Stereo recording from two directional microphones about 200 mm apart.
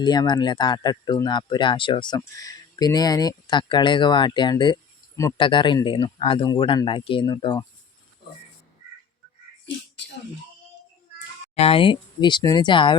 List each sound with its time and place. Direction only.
0.0 s speech: 20° left (ahead or behind)
9.6 s a sound: 60° left (ahead or behind)
11.5 s speech: 30° left (ahead or behind)